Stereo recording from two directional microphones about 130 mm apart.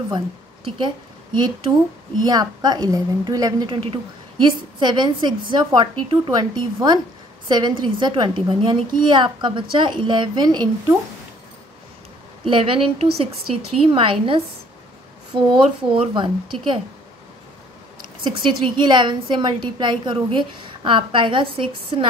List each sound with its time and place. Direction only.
0.7 s a woman's voice: 35° right (ahead or behind)
12.4 s a woman's voice: 40° right (ahead or behind)
18.2 s a woman's voice: 35° right (ahead or behind)